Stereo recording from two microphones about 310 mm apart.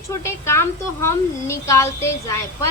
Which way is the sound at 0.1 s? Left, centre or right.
Centre.